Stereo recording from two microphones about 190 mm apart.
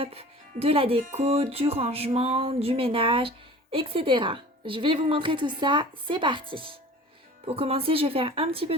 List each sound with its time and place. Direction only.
0.0 s speech: 30° right (ahead or behind)